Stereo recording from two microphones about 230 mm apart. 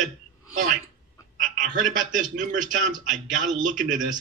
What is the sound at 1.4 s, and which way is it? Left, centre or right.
Speech, right.